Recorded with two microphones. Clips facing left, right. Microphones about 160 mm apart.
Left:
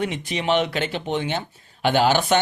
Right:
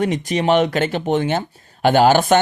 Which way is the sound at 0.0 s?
45° right (ahead or behind).